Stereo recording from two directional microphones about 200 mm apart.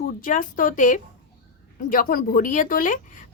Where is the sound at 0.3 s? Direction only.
40° left (ahead or behind).